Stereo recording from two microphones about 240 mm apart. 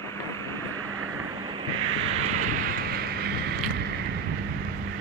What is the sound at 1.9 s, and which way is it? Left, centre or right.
Vehicle, right.